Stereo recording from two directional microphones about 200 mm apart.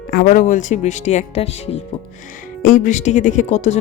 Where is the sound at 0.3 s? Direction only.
40° left (ahead or behind).